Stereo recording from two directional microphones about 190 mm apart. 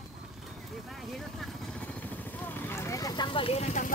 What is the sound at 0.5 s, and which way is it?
Vehicle, centre (ahead or behind).